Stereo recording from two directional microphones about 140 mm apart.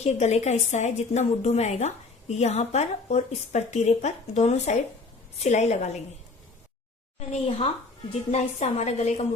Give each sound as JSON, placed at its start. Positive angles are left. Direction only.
{"t": 0.0, "sound": "a woman's voice", "side_deg": 55}
{"t": 7.2, "sound": "a woman's voice", "side_deg": 45}